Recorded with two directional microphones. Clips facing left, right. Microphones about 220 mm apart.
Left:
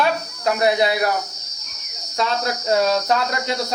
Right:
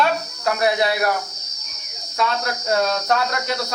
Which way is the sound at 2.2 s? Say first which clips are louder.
Left 1 dB; 20° left (ahead or behind).